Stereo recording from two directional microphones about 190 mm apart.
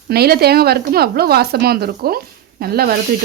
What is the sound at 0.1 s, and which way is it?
A woman's voice, 55° right (ahead or behind).